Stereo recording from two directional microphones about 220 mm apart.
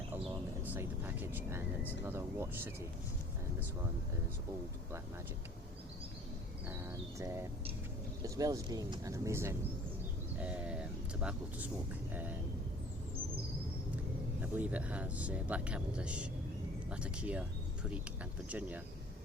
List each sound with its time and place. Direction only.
0.6 s speech: 10° right (ahead or behind)
6.7 s speech: 10° right (ahead or behind)
14.4 s speech: 5° right (ahead or behind)
18.4 s speech: 5° right (ahead or behind)